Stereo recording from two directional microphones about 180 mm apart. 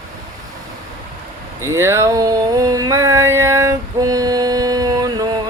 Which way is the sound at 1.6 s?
15° right (ahead or behind).